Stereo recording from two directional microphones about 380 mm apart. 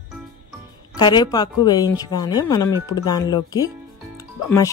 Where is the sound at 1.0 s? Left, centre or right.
Centre.